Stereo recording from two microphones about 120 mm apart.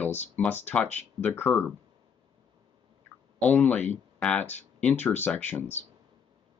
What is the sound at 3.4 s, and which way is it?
Speech, 15° left (ahead or behind).